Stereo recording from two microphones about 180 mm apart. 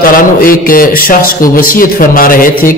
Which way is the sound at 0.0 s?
50° left (ahead or behind).